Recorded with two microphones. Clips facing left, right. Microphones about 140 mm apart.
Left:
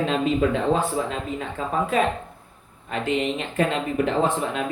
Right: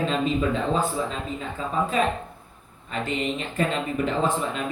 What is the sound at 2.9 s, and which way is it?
Speech, 60° left (ahead or behind).